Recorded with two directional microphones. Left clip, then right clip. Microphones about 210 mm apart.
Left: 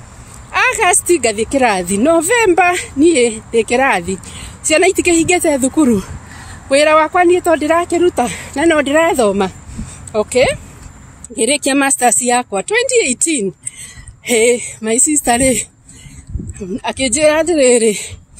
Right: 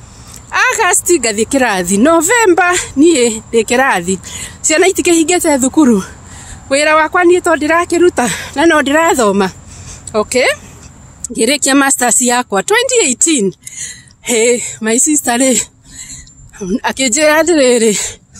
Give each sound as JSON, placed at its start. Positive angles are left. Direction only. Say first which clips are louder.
{"t": 0.5, "sound": "a woman's voice", "louder": "right 1 dB", "side_deg": -20}